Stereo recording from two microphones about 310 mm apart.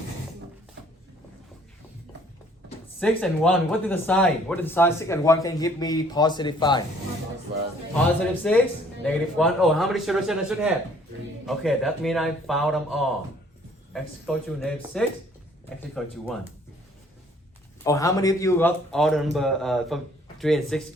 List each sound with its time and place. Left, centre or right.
3.0 s speech: centre
8.4 s a man's voice: centre
17.8 s a man's voice: centre